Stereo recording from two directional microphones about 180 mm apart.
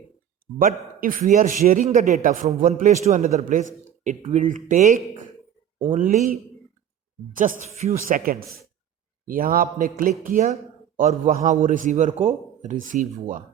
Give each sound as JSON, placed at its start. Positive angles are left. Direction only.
{"t": 0.6, "sound": "a man's voice", "side_deg": -50}
{"t": 7.3, "sound": "a man's voice", "side_deg": -45}